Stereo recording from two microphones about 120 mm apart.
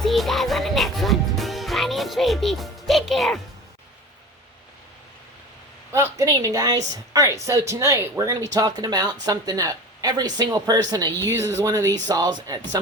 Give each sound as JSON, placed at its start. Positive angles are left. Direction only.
{"t": 0.0, "sound": "music", "side_deg": 0}
{"t": 5.9, "sound": "speech", "side_deg": -25}